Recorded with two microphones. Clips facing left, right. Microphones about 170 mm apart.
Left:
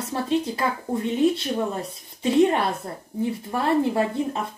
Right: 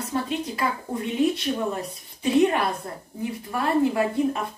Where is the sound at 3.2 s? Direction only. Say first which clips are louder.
Left 3 dB; 25° left (ahead or behind).